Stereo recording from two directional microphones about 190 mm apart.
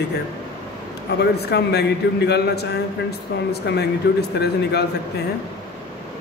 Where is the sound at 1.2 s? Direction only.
60° left (ahead or behind).